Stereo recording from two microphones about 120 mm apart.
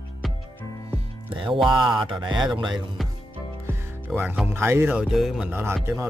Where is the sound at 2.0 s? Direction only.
40° right (ahead or behind).